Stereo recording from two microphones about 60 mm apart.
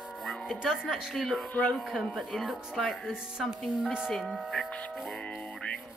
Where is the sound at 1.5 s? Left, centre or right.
Left.